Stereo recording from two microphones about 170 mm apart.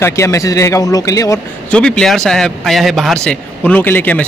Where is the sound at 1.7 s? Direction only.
5° left (ahead or behind).